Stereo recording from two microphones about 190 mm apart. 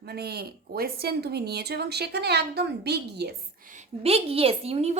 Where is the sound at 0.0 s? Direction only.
55° right (ahead or behind).